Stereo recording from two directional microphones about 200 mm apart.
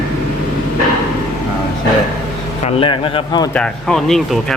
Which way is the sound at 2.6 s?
25° left (ahead or behind).